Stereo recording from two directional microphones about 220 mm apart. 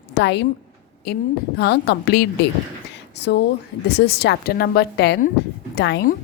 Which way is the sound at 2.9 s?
50° left (ahead or behind).